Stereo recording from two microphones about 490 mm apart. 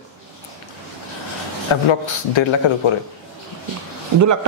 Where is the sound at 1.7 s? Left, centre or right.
Left.